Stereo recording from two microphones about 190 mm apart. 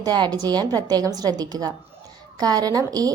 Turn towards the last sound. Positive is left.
turn(degrees=-20)  # may be behind; listen again after turning